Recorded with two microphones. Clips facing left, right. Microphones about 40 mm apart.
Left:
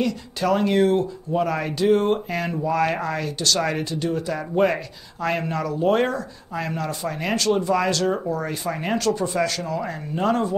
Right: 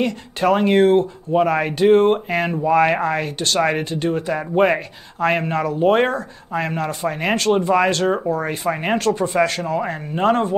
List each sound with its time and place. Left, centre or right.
0.0 s speech: right